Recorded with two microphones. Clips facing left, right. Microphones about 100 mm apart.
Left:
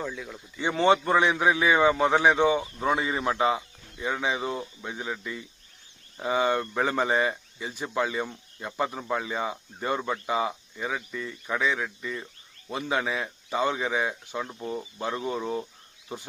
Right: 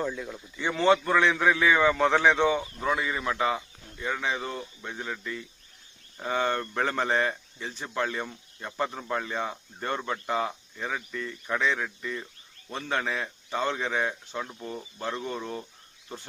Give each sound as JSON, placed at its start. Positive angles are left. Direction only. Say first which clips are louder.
{"t": 0.0, "sound": "speech", "louder": "right 3 dB", "side_deg": 0}
{"t": 0.8, "sound": "speech", "louder": "left 1 dB", "side_deg": 20}
{"t": 3.9, "sound": "speech", "louder": "left 2 dB", "side_deg": 15}